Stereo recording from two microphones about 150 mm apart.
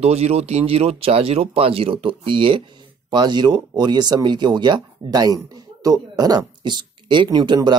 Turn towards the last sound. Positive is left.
turn(degrees=-30)  # may be behind; listen again after turning